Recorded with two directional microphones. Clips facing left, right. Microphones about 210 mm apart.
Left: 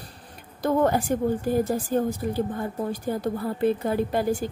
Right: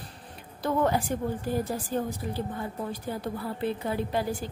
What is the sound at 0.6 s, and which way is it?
A woman's voice, 45° left (ahead or behind).